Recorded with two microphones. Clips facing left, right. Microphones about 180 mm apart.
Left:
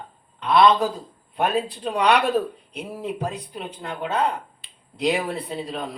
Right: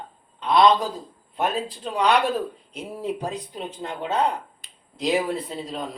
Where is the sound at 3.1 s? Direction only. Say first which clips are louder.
Left 1 dB; 65° left (ahead or behind).